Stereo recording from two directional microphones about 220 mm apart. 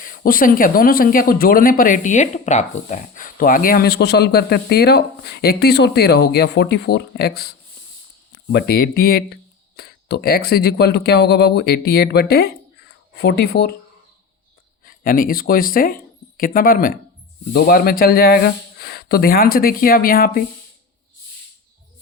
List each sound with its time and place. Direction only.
0.0 s speech: 40° left (ahead or behind)
8.5 s speech: 45° left (ahead or behind)
14.8 s speech: 40° left (ahead or behind)